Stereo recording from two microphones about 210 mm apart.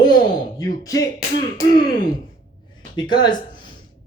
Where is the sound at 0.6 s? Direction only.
15° left (ahead or behind).